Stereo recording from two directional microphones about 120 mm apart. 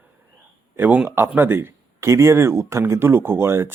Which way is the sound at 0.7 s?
15° right (ahead or behind).